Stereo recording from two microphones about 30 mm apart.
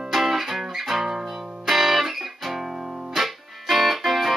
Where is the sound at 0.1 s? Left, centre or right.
Centre.